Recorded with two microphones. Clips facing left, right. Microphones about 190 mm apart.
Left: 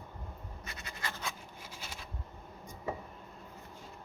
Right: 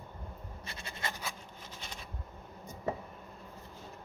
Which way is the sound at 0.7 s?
30° right (ahead or behind).